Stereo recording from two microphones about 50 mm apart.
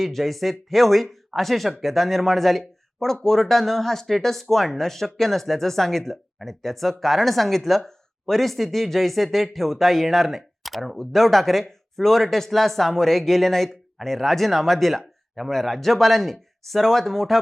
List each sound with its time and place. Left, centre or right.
0.0 s speech: centre